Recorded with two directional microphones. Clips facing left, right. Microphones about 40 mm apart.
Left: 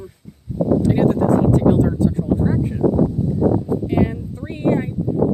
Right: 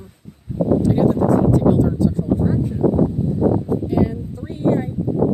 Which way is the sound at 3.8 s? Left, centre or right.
Left.